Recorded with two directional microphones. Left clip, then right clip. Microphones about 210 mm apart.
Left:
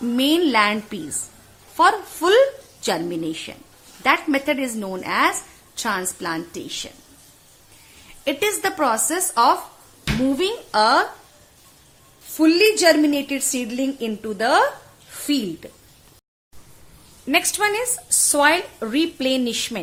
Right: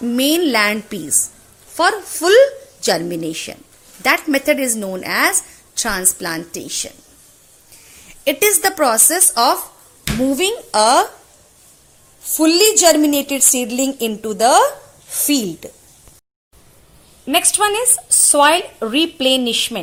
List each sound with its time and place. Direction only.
0.1 s a woman's voice: 15° right (ahead or behind)
8.0 s a woman's voice: 20° right (ahead or behind)
12.4 s a woman's voice: 15° right (ahead or behind)
17.2 s a woman's voice: 5° right (ahead or behind)